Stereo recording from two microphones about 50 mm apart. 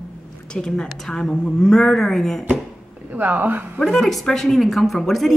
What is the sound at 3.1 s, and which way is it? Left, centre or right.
Speech, right.